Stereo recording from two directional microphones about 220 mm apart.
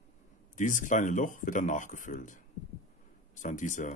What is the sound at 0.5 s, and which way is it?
Speech, 35° left (ahead or behind).